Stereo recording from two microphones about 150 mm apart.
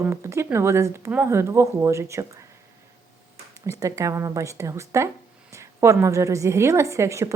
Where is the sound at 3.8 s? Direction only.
20° right (ahead or behind).